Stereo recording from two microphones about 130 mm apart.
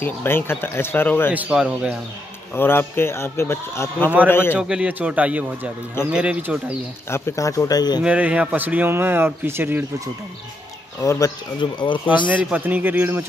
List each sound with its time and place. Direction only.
0.0 s speech: 15° left (ahead or behind)
1.3 s speech: 10° right (ahead or behind)
2.5 s a man's voice: 15° left (ahead or behind)
4.6 s speech: 5° right (ahead or behind)
7.1 s a man's voice: 20° left (ahead or behind)
8.0 s speech: 10° right (ahead or behind)
11.0 s a man's voice: 25° left (ahead or behind)
11.6 s speech: 40° left (ahead or behind)
12.4 s speech: 15° right (ahead or behind)